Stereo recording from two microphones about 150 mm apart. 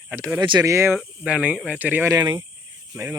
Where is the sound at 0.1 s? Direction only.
15° right (ahead or behind).